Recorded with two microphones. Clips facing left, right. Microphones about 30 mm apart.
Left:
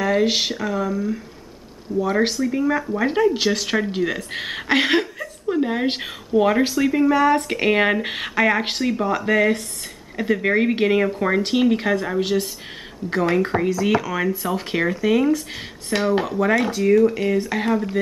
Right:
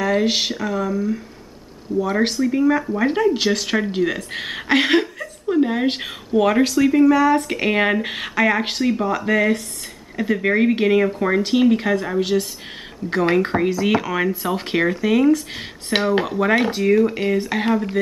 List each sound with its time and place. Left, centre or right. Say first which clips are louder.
0.0 s speech: even; centre
7.1 s speech: right 2 dB; centre
7.4 s speech: left 1 dB; centre
13.5 s speech: right 1 dB; centre